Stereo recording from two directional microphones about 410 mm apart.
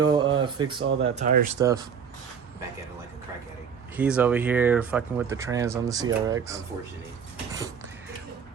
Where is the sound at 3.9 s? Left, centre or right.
Centre.